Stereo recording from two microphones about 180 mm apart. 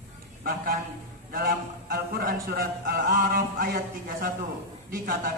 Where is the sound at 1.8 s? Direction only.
55° right (ahead or behind).